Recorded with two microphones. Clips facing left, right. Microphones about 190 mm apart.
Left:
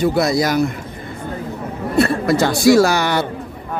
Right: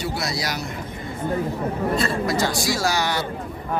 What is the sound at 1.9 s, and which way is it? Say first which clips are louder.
A woman's voice: left 11 dB; 60° left (ahead or behind).